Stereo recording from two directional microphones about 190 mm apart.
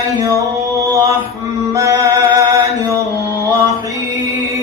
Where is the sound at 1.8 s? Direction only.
20° right (ahead or behind).